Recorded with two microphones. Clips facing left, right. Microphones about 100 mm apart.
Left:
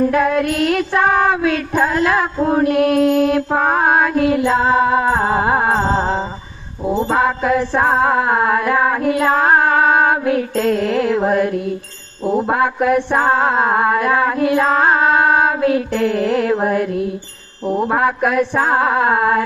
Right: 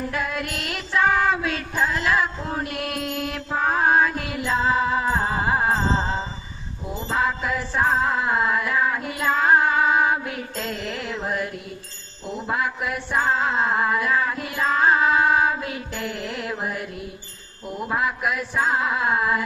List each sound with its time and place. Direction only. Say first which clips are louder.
0.0 s female singing: left 12 dB; 50° left (ahead or behind)
4.4 s mantra: left 7 dB; 40° left (ahead or behind)
4.8 s mantra: left 7 dB; 50° left (ahead or behind); by 5.6 s 35° left (ahead or behind)
5.6 s music: left 6 dB; 45° left (ahead or behind)
6.8 s female singing: left 9 dB; 35° left (ahead or behind); by 8.2 s 55° left (ahead or behind)
8.3 s female singing: left 7 dB; 45° left (ahead or behind)
17.7 s mantra: left 9 dB; 35° left (ahead or behind)